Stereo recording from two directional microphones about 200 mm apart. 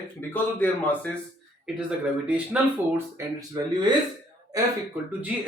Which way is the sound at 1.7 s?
5° right (ahead or behind).